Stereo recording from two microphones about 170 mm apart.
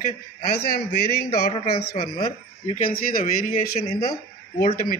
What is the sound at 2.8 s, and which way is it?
Speech, 55° left (ahead or behind).